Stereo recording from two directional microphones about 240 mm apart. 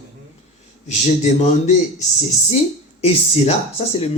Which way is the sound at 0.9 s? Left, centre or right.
Left.